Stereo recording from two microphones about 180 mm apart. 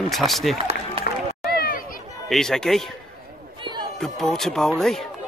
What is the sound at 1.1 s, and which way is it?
Run, 55° left (ahead or behind).